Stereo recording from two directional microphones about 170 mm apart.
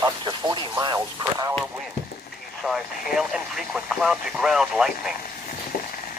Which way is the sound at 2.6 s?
Centre (ahead or behind).